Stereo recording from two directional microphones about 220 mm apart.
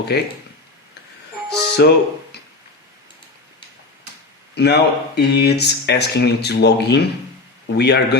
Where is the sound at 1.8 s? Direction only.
50° left (ahead or behind).